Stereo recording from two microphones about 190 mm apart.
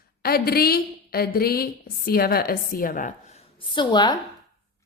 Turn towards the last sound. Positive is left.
turn(degrees=25)  # may be behind; listen again after turning